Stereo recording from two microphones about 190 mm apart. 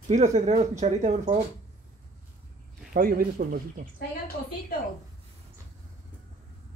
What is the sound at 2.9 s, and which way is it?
Speech, 50° right (ahead or behind).